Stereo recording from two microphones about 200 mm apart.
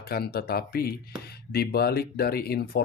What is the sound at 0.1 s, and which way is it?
Speech, 50° left (ahead or behind).